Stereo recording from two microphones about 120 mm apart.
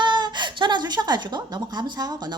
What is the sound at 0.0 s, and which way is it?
Speech, 40° right (ahead or behind).